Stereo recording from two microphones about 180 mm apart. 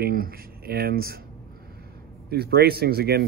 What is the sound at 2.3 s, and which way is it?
Speech, 60° right (ahead or behind).